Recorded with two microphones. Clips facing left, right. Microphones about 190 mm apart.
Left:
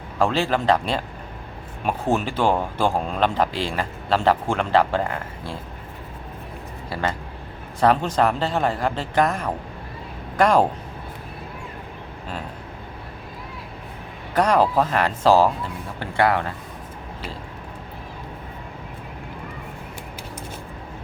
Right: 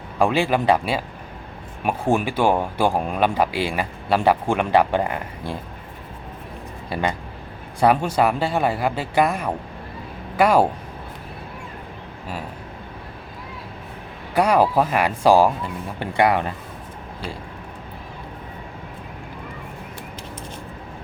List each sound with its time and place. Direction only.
0.2 s speech: 15° right (ahead or behind)
6.9 s speech: 15° right (ahead or behind)
14.3 s speech: 10° right (ahead or behind)